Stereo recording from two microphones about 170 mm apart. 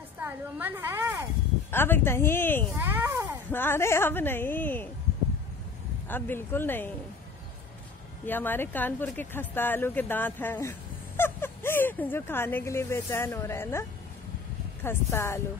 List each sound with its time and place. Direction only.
0.2 s a woman's voice: 10° right (ahead or behind)
1.7 s speech: 15° left (ahead or behind)
2.7 s a sound: 15° right (ahead or behind)
3.5 s speech: 15° left (ahead or behind)
6.0 s speech: 10° left (ahead or behind)
8.3 s speech: 10° left (ahead or behind)